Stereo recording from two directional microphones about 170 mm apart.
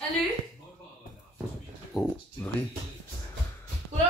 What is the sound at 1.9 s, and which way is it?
Speech, centre (ahead or behind).